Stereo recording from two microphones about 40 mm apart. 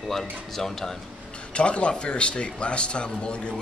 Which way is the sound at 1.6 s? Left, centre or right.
Left.